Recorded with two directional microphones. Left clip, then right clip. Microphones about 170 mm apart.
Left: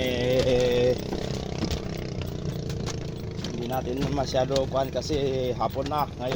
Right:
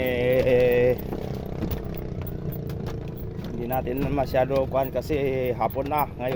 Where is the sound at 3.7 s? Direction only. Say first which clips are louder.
Right 3 dB; 20° right (ahead or behind).